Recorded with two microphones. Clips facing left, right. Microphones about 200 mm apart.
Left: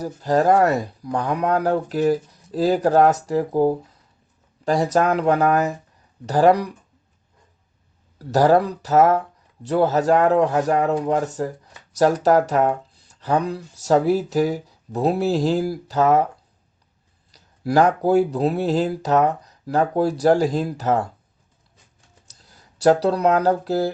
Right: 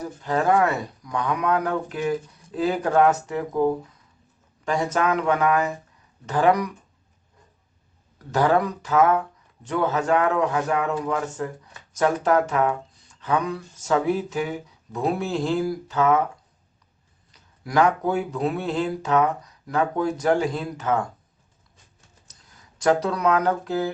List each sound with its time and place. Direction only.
0.0 s speech: 35° left (ahead or behind)
8.2 s speech: 35° left (ahead or behind)
17.3 s speech: 35° left (ahead or behind)
22.4 s speech: 35° left (ahead or behind)